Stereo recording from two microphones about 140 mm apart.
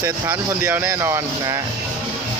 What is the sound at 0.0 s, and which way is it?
Speech, 15° right (ahead or behind).